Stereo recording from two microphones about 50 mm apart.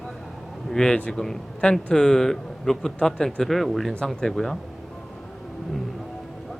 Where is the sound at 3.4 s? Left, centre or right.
Centre.